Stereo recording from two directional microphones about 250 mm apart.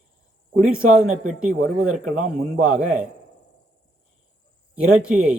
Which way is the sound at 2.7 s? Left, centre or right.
Centre.